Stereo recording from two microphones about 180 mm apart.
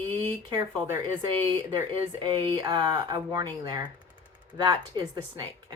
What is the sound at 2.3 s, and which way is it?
Speech, 25° right (ahead or behind).